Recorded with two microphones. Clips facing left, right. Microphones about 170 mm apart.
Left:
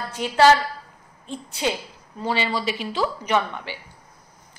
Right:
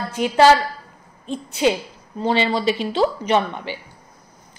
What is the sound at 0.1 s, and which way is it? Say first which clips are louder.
A woman's voice: right 3 dB; 15° right (ahead or behind).